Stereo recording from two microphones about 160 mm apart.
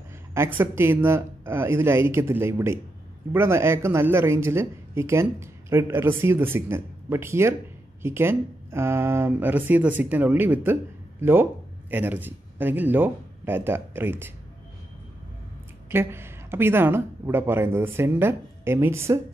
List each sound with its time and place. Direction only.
0.3 s speech: 15° right (ahead or behind)
15.9 s speech: 15° right (ahead or behind)